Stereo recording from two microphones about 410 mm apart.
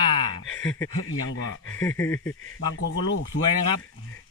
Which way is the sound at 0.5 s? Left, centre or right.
Centre.